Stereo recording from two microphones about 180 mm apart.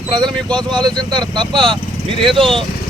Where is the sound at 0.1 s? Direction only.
25° right (ahead or behind).